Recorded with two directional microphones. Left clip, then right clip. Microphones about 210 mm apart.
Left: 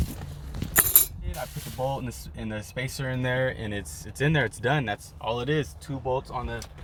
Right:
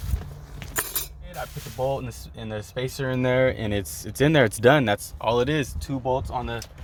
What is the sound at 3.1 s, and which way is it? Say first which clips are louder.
Speech: right 6 dB; 45° right (ahead or behind).